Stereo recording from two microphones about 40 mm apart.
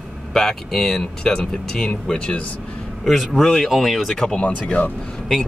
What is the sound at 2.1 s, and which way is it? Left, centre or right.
Speech, left.